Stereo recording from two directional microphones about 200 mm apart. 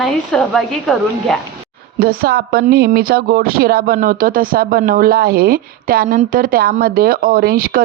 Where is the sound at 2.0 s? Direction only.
50° right (ahead or behind).